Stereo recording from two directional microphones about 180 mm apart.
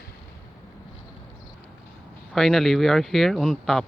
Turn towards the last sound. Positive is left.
turn(degrees=0)  # may be behind; listen again after turning